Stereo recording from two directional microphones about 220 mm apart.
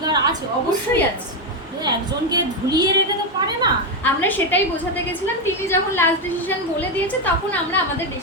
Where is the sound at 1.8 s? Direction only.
20° right (ahead or behind).